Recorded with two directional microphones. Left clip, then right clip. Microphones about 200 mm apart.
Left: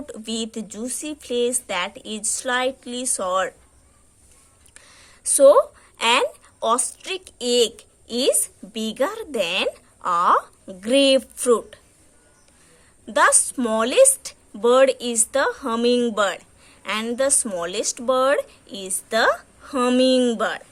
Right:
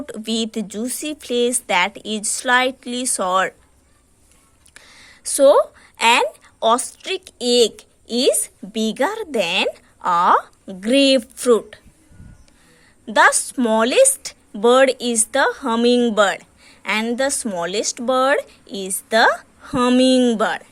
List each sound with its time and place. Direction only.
0.0 s speech: 25° right (ahead or behind)
4.7 s speech: 20° right (ahead or behind)
13.1 s speech: 20° right (ahead or behind)